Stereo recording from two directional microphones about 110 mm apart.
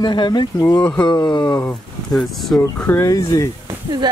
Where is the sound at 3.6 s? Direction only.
35° right (ahead or behind).